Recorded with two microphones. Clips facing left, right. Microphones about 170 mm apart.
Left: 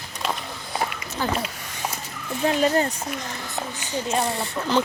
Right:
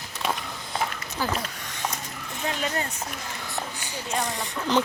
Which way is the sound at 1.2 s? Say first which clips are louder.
Left 3 dB; 10° left (ahead or behind).